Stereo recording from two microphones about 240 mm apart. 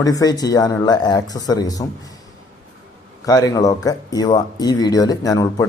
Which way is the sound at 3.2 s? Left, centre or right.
Centre.